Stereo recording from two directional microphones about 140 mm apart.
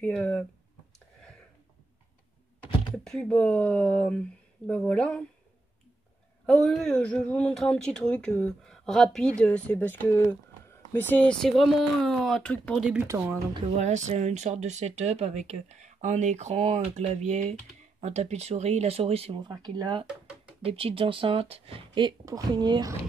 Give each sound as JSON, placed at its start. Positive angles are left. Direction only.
{"t": 0.0, "sound": "speech", "side_deg": 5}
{"t": 2.6, "sound": "speech", "side_deg": 5}
{"t": 6.4, "sound": "speech", "side_deg": 5}
{"t": 13.0, "sound": "speech", "side_deg": -20}
{"t": 13.7, "sound": "speech", "side_deg": -50}